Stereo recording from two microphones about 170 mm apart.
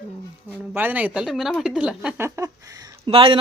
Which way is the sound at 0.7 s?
10° right (ahead or behind).